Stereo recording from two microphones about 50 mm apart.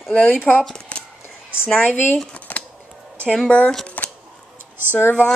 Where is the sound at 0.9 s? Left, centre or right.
Left.